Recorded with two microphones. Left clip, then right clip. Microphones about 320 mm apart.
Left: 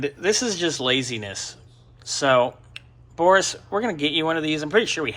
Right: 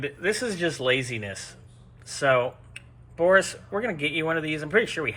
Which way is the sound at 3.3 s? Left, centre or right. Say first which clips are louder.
Left 3 dB; left.